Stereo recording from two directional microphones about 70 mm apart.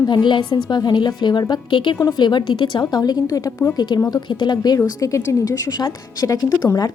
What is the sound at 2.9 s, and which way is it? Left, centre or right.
A woman's voice, left.